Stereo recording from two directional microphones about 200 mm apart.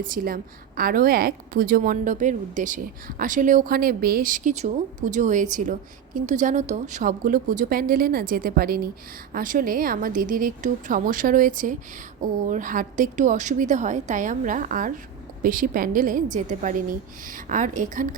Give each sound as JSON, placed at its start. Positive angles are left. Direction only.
{"t": 0.0, "sound": "a woman's voice", "side_deg": -45}